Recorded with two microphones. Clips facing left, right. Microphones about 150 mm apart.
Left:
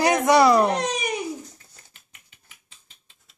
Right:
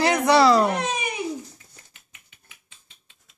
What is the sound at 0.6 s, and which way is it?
Speech, 35° left (ahead or behind).